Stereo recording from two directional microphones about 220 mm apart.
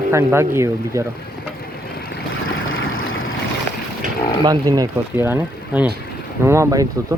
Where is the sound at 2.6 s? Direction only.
65° left (ahead or behind).